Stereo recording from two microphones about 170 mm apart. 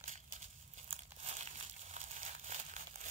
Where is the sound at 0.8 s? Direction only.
40° right (ahead or behind).